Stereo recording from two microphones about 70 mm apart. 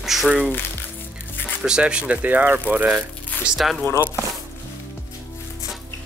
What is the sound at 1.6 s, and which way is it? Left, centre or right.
Speech, centre.